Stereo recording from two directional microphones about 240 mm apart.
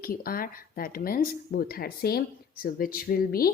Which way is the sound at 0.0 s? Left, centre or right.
Left.